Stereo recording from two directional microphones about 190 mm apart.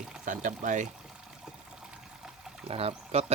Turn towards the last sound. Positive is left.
turn(degrees=-35)  # may be behind; listen again after turning